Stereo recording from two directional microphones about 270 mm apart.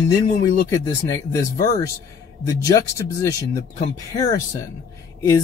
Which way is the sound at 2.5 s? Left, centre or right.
Centre.